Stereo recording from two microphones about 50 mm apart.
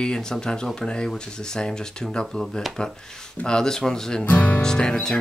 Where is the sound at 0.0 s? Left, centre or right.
Centre.